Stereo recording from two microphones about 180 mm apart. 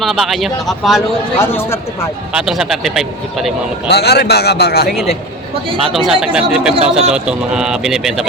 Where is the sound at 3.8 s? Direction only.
65° left (ahead or behind).